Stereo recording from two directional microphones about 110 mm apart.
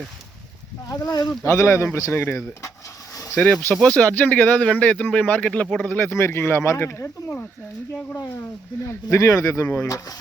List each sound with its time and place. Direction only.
1.5 s speech: 25° left (ahead or behind)
3.3 s speech: 10° left (ahead or behind); by 10.2 s 30° left (ahead or behind)